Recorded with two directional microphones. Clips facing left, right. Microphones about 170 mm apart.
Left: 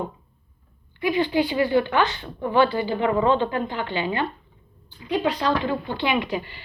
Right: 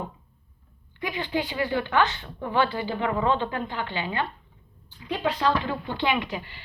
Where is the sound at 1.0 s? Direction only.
15° left (ahead or behind).